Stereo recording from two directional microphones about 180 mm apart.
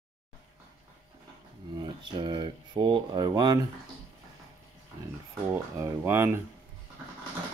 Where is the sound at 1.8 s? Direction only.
25° right (ahead or behind).